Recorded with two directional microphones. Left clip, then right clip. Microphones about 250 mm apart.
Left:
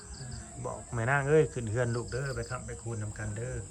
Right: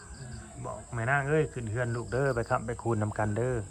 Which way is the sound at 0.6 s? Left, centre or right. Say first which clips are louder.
Even; centre.